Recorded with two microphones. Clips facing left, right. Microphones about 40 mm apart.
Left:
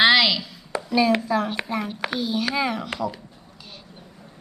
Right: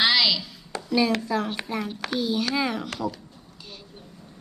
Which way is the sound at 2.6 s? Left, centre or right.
Centre.